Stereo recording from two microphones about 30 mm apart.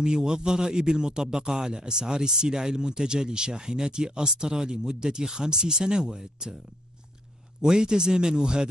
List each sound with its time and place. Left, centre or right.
0.0 s a man's voice: right
7.6 s a man's voice: right